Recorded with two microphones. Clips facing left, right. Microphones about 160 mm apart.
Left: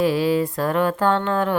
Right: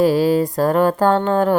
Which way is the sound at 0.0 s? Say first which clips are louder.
Right 4 dB; 40° right (ahead or behind).